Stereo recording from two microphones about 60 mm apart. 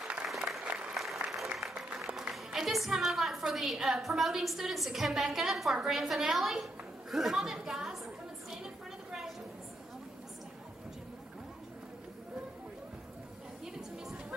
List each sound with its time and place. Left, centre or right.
0.0 s applause: centre
0.3 s applause: centre
2.0 s music: centre
2.3 s a woman's voice: centre
5.9 s chatter: centre
13.7 s music: centre